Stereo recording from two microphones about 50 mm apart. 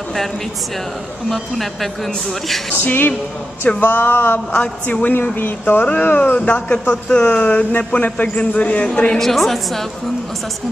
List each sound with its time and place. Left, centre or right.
1.3 s a woman's voice: centre
2.8 s speech: left
4.5 s a woman's voice: left
6.3 s a woman's voice: left
9.2 s a woman's voice: centre